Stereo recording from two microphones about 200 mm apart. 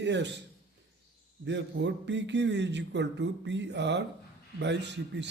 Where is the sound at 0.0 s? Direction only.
60° right (ahead or behind).